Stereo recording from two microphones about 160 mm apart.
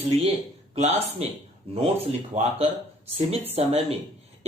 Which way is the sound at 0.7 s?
40° right (ahead or behind).